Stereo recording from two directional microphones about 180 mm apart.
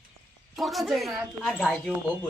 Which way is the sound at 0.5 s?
Centre (ahead or behind).